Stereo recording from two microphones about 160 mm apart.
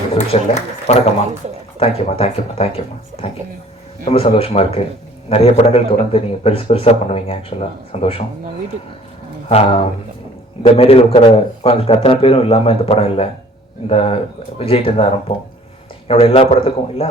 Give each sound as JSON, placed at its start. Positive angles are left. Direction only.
{"t": 0.1, "sound": "a man's voice", "side_deg": 40}
{"t": 9.5, "sound": "a man's voice", "side_deg": 40}